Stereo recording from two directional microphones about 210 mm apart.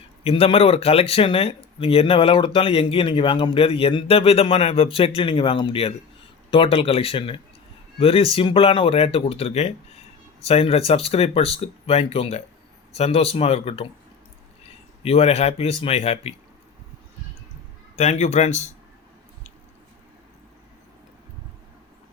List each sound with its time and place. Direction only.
0.3 s speech: 25° left (ahead or behind)
17.9 s speech: 30° left (ahead or behind)